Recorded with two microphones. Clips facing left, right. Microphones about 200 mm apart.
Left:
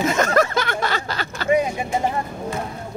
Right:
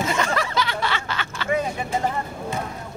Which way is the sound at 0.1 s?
45° left (ahead or behind).